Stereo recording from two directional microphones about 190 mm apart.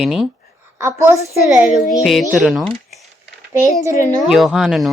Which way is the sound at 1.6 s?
Centre (ahead or behind).